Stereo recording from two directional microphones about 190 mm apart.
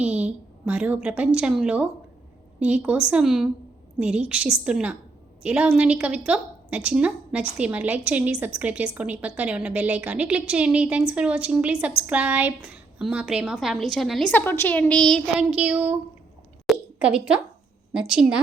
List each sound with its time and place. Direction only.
0.0 s a woman's voice: 5° right (ahead or behind)
16.6 s a sound: 5° right (ahead or behind)
17.9 s a woman's voice: 5° right (ahead or behind)